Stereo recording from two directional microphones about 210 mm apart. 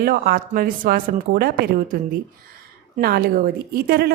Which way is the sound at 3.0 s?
45° right (ahead or behind).